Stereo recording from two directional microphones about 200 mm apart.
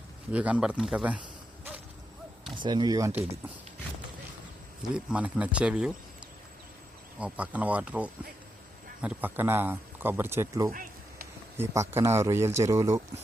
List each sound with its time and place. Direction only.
0.3 s speech: 5° right (ahead or behind)
2.6 s speech: 20° right (ahead or behind)
4.8 s speech: 5° right (ahead or behind)
7.2 s speech: 5° right (ahead or behind)
10.7 s a sound: 45° right (ahead or behind)
11.5 s speech: 15° right (ahead or behind)